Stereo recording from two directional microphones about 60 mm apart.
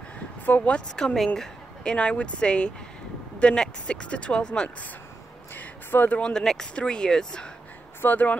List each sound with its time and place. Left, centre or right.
0.5 s speech: left
0.9 s a woman's voice: centre
2.0 s speech: left
5.6 s speech: left
6.2 s speech: centre
8.0 s speech: left